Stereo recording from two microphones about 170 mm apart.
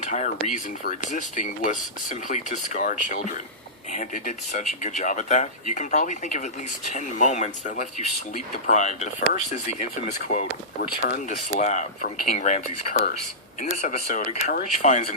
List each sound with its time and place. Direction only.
0.0 s a sound: 45° left (ahead or behind)
0.4 s speech: 50° left (ahead or behind)
11.1 s speech: 45° left (ahead or behind)